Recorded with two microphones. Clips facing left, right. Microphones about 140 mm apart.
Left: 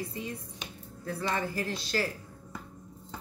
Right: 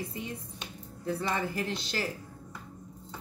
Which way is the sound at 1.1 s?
20° right (ahead or behind).